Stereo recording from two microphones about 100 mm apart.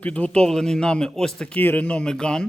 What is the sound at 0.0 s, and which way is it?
Speech, 10° left (ahead or behind).